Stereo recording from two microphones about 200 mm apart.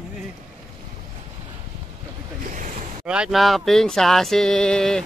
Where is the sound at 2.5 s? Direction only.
40° right (ahead or behind).